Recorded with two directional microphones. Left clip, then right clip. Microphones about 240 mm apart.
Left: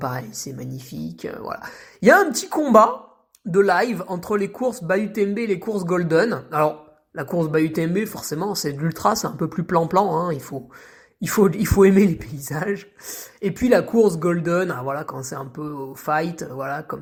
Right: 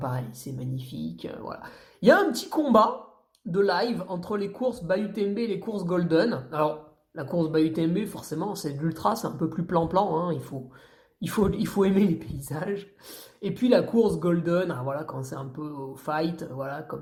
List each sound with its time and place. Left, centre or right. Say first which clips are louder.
0.0 s speech: left 6 dB; left